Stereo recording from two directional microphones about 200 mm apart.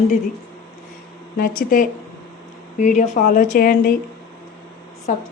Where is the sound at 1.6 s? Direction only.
45° left (ahead or behind).